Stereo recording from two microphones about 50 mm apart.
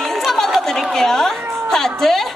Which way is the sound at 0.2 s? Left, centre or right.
Centre.